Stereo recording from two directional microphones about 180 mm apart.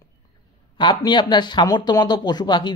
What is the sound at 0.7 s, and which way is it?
Speech, 25° left (ahead or behind).